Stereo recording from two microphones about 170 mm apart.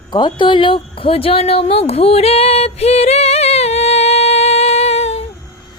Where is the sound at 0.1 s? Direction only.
25° left (ahead or behind).